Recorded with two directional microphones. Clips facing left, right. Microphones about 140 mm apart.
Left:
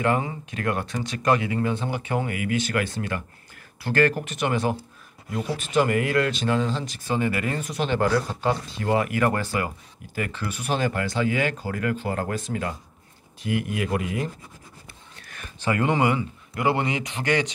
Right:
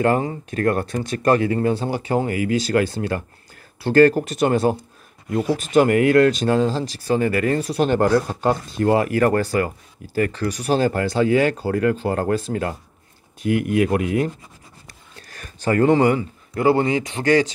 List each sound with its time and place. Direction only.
0.0 s speech: 40° right (ahead or behind)
13.4 s speech: 50° right (ahead or behind)
15.2 s speech: 40° right (ahead or behind)